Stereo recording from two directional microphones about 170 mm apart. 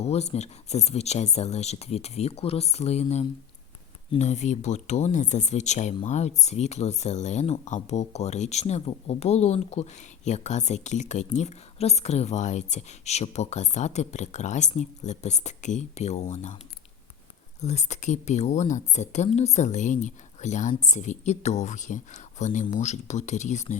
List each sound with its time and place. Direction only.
0.0 s speech: 40° left (ahead or behind)
17.6 s speech: 40° left (ahead or behind)